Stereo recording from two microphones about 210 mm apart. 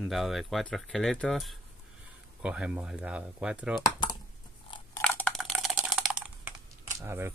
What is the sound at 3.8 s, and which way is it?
Computer keyboard, 20° left (ahead or behind).